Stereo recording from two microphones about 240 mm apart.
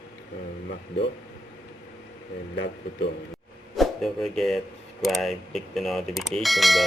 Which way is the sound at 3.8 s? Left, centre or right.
Centre.